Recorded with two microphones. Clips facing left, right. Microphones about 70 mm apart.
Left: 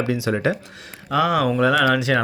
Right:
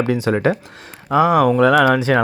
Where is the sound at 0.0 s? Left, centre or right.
Right.